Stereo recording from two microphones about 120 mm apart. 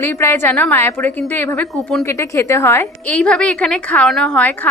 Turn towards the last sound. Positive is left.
turn(degrees=10)  # may be behind; listen again after turning